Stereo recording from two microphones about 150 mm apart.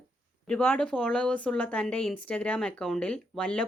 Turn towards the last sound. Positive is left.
turn(degrees=5)  # may be behind; listen again after turning